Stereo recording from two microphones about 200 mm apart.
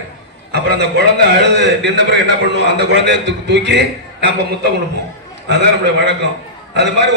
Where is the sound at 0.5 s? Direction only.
55° right (ahead or behind).